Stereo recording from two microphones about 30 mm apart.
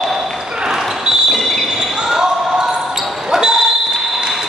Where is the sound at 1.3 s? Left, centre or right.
Centre.